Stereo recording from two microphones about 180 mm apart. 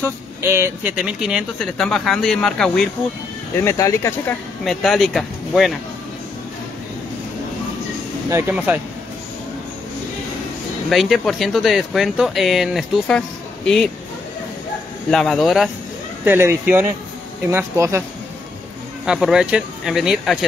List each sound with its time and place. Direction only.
0.4 s speech: 15° right (ahead or behind); by 2.9 s 5° left (ahead or behind)
3.6 s speech: 15° left (ahead or behind)
4.6 s speech: centre (ahead or behind)
8.3 s speech: 15° right (ahead or behind)
10.9 s speech: centre (ahead or behind)
15.0 s speech: centre (ahead or behind)
16.3 s speech: 10° right (ahead or behind)
19.0 s speech: centre (ahead or behind)